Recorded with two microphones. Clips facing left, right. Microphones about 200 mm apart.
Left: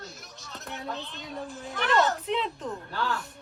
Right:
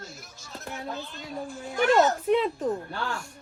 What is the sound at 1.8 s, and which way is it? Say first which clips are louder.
Speech: right 4 dB; 45° right (ahead or behind).